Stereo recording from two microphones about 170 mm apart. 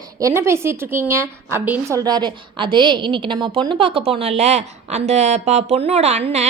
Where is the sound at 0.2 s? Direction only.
15° right (ahead or behind).